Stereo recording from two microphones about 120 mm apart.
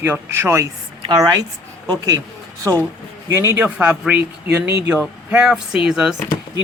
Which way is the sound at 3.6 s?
15° right (ahead or behind).